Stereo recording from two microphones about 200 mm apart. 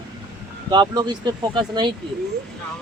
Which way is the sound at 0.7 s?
20° right (ahead or behind).